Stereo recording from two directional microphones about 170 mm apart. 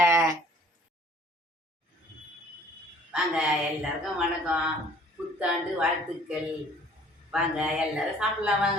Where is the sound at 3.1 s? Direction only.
5° right (ahead or behind).